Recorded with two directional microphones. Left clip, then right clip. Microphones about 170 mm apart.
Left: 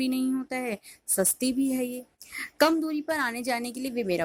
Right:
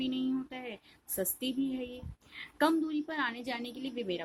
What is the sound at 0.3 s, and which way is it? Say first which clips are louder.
A woman's voice: left 9 dB; 40° left (ahead or behind).